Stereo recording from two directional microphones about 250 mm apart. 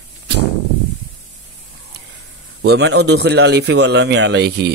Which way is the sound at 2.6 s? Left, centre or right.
Right.